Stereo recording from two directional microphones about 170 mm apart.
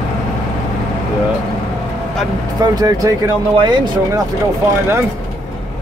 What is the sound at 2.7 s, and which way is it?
Speech, 20° right (ahead or behind).